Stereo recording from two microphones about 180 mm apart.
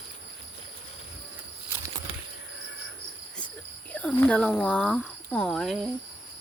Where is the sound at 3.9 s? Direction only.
5° left (ahead or behind).